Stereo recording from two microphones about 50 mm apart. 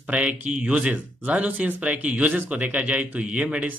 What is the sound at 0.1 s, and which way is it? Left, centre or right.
Speech, right.